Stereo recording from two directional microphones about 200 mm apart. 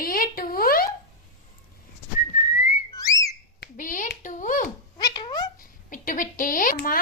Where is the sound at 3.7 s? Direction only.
40° left (ahead or behind).